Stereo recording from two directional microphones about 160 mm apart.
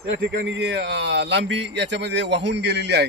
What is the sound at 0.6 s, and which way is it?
Speech, 90° right.